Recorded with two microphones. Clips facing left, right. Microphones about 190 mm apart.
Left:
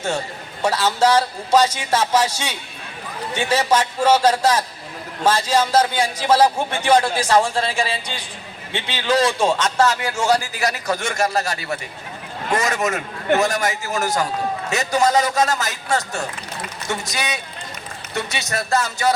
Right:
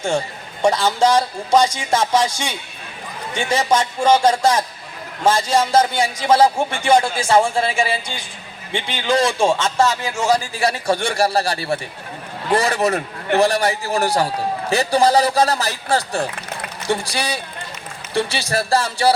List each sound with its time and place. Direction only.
0.6 s a man's voice: 10° right (ahead or behind)
3.3 s a man's voice: 10° right (ahead or behind)
8.7 s a man's voice: 10° right (ahead or behind)
10.5 s a man's voice: 30° right (ahead or behind)